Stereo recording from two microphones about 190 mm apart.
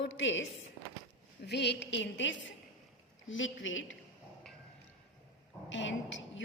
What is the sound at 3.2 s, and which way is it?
Speech, 90° left.